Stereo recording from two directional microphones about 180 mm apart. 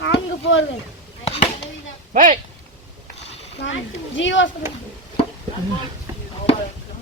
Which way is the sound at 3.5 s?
90° left.